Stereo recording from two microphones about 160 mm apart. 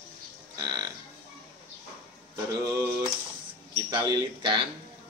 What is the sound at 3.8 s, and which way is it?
Speech, 25° right (ahead or behind).